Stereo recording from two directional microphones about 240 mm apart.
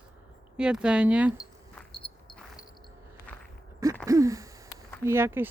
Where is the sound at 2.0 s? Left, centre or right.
Left.